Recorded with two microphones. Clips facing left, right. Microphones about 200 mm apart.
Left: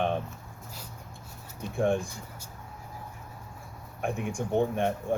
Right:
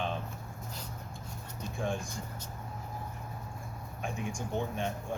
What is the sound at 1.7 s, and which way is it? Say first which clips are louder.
Speech: left 9 dB; 55° left (ahead or behind).